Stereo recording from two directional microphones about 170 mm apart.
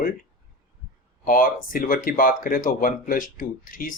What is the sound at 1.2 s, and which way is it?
A man's voice, 55° left (ahead or behind).